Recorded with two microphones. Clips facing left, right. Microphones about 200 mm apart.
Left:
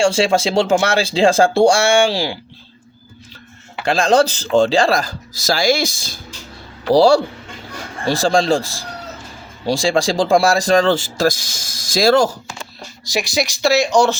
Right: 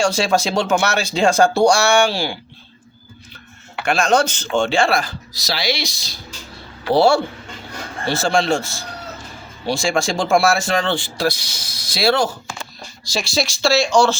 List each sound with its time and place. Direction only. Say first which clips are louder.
0.0 s speech: left 3 dB; 25° left (ahead or behind)
3.8 s speech: left 3 dB; 30° left (ahead or behind); by 6.1 s 50° left (ahead or behind)
6.9 s speech: left 3 dB; 35° left (ahead or behind)
13.1 s speech: left 2 dB; 20° left (ahead or behind)